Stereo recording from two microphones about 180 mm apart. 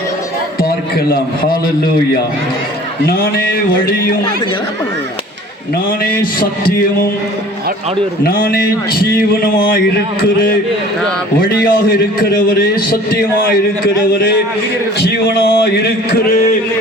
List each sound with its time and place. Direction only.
0.9 s a man's voice: 55° left (ahead or behind)
3.1 s a man's voice: 55° left (ahead or behind)
5.7 s a man's voice: 55° left (ahead or behind)
8.2 s a man's voice: 55° left (ahead or behind)
11.3 s a man's voice: 55° left (ahead or behind)
14.9 s a man's voice: 65° left (ahead or behind)